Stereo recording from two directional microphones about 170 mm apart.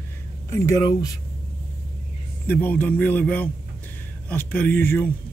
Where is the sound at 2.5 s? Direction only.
10° left (ahead or behind).